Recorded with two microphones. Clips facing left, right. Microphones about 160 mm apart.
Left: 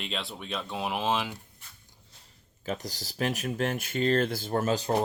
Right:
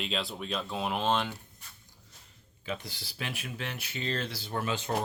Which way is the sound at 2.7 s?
40° left (ahead or behind).